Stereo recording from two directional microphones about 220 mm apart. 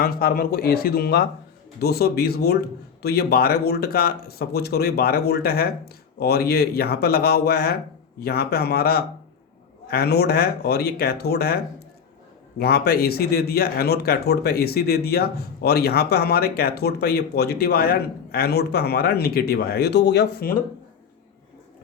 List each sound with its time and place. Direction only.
0.0 s speech: 45° left (ahead or behind)